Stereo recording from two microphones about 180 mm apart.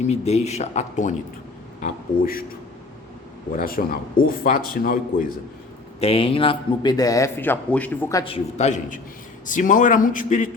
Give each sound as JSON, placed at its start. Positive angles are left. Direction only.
{"t": 0.0, "sound": "speech", "side_deg": 35}
{"t": 1.8, "sound": "speech", "side_deg": 55}
{"t": 3.8, "sound": "speech", "side_deg": 50}
{"t": 6.0, "sound": "a man's voice", "side_deg": 30}
{"t": 8.2, "sound": "speech", "side_deg": 35}